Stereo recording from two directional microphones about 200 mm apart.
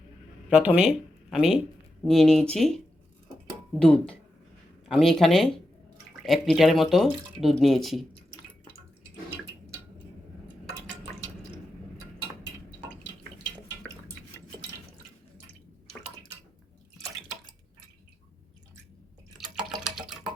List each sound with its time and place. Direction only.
0.5 s speech: 5° right (ahead or behind)
19.4 s drip: centre (ahead or behind)